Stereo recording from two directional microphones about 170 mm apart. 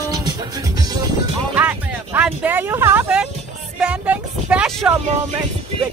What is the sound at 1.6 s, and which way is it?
Speech, 10° right (ahead or behind).